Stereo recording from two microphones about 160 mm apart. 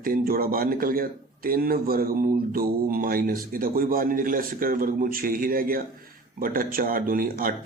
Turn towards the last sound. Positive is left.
turn(degrees=-60)  # may be behind; listen again after turning